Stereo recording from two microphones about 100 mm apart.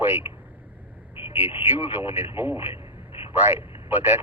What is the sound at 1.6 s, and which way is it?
Speech, 20° right (ahead or behind).